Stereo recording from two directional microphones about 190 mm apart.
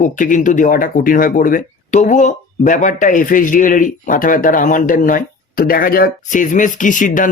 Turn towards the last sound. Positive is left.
turn(degrees=45)  # may be behind; listen again after turning